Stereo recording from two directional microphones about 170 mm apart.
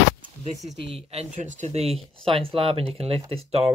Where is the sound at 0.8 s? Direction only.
35° right (ahead or behind).